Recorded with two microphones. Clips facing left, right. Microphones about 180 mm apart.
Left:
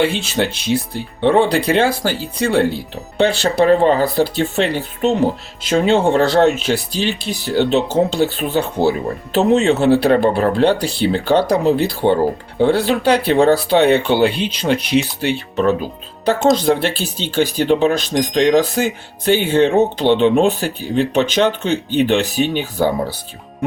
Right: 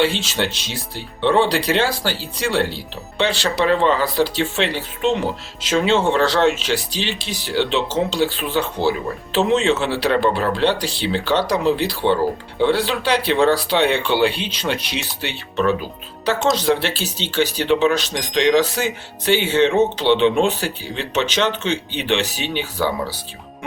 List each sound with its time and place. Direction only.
0.0 s speech: 55° left (ahead or behind)
16.6 s speech: 50° left (ahead or behind)